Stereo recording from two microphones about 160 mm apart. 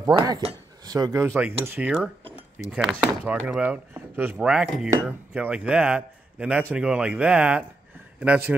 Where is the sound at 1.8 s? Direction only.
5° right (ahead or behind).